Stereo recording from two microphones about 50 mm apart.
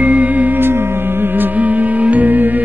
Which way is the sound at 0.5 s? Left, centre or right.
Right.